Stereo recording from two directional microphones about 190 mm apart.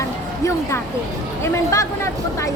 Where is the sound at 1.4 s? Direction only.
15° left (ahead or behind).